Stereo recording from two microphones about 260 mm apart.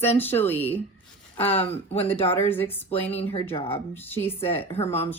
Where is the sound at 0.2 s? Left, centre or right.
Centre.